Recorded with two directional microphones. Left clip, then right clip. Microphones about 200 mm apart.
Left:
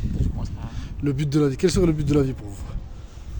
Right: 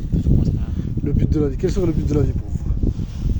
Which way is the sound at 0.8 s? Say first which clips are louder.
Right 1 dB; 40° left (ahead or behind).